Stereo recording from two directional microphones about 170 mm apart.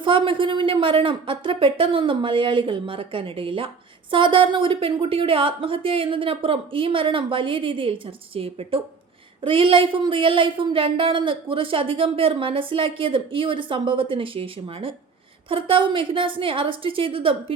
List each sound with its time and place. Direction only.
0.0 s speech: 30° right (ahead or behind)